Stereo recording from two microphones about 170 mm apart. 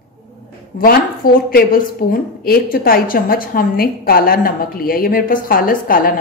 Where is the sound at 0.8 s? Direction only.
60° left (ahead or behind).